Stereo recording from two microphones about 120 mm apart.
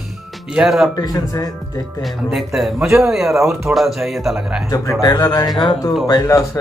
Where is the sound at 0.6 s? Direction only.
Centre (ahead or behind).